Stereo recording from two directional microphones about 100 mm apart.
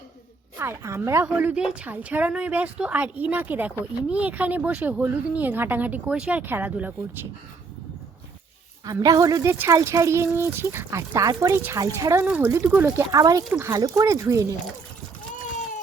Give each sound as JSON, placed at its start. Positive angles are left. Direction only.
{"t": 0.6, "sound": "speech", "side_deg": -25}
{"t": 1.4, "sound": "speech", "side_deg": -10}
{"t": 8.8, "sound": "speech", "side_deg": -40}
{"t": 12.2, "sound": "speech", "side_deg": -15}
{"t": 12.5, "sound": "speech", "side_deg": -30}
{"t": 13.1, "sound": "speech", "side_deg": -35}